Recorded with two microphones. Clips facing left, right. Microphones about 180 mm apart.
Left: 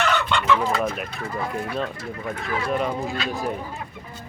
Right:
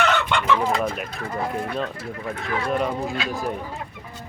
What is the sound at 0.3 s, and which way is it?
Chicken, 15° right (ahead or behind).